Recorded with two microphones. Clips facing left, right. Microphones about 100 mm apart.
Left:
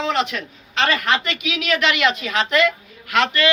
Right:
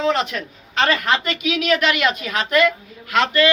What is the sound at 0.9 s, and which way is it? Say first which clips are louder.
Speech: even; 35° right (ahead or behind).